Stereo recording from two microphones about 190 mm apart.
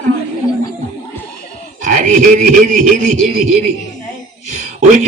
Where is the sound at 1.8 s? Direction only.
45° right (ahead or behind).